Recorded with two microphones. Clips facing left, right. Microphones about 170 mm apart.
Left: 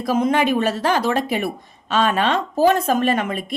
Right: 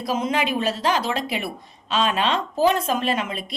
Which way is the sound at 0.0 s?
55° left (ahead or behind).